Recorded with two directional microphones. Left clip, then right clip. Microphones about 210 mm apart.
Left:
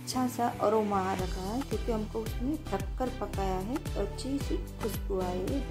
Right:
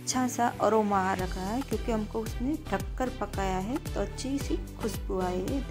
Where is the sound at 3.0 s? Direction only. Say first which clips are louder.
Right 2 dB; 25° right (ahead or behind).